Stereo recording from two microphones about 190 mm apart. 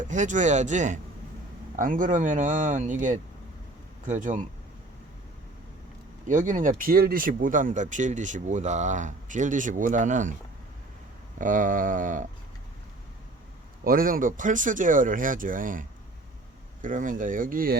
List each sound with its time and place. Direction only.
0.0 s speech: 40° right (ahead or behind)
6.2 s speech: 40° right (ahead or behind)
11.3 s speech: 45° right (ahead or behind)
13.8 s speech: 50° right (ahead or behind)